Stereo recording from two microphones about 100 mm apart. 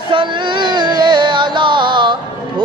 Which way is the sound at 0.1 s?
55° right (ahead or behind).